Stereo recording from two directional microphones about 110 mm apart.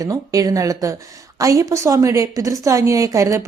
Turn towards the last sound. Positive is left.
turn(degrees=-30)  # may be behind; listen again after turning